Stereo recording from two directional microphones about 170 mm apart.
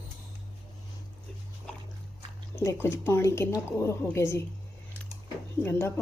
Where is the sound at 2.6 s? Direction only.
15° left (ahead or behind).